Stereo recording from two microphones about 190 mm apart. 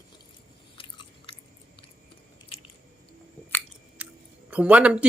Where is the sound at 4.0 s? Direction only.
5° right (ahead or behind).